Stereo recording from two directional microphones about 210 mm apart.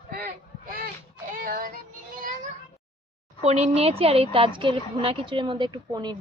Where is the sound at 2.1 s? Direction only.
40° right (ahead or behind).